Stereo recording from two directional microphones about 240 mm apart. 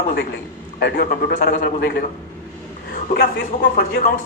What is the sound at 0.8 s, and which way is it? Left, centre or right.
Speech, left.